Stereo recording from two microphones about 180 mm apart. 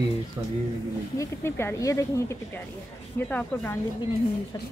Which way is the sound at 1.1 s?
15° left (ahead or behind).